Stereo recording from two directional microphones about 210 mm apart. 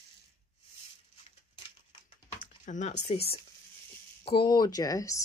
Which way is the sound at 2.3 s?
35° left (ahead or behind).